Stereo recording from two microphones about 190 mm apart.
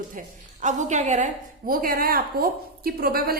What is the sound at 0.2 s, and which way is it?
A woman's voice, 40° right (ahead or behind).